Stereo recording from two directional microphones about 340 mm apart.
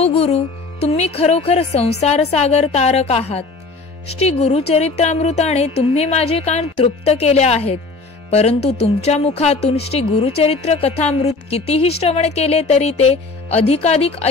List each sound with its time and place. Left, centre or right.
0.0 s a woman's voice: centre